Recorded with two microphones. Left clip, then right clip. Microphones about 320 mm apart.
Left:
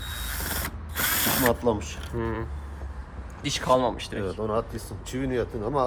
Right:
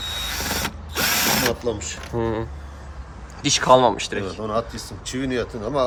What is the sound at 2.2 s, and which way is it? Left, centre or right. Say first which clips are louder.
Speech: right 7 dB; centre.